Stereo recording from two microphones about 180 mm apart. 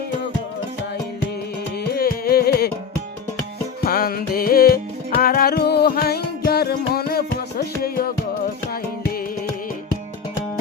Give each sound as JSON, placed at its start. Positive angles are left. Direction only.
{"t": 1.9, "sound": "music", "side_deg": 60}
{"t": 3.8, "sound": "music", "side_deg": 55}